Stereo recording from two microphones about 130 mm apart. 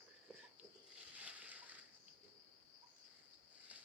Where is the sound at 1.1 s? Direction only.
10° right (ahead or behind).